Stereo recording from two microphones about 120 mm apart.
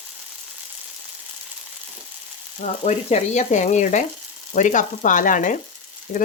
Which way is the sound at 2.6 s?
70° left (ahead or behind).